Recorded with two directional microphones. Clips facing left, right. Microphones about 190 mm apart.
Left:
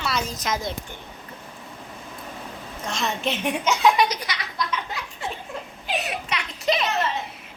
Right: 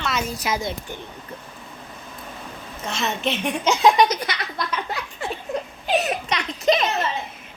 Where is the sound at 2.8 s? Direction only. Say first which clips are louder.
Right 1 dB; 5° right (ahead or behind).